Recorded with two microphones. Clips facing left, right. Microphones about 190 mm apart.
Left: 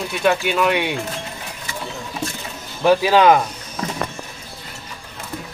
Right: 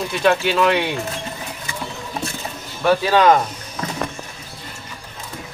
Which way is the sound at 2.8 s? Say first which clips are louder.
Left 2 dB; 15° left (ahead or behind).